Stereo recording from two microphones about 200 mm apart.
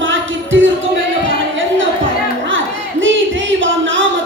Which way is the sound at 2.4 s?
70° right (ahead or behind).